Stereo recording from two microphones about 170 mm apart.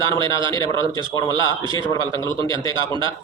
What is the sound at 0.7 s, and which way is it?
Speech, 30° right (ahead or behind).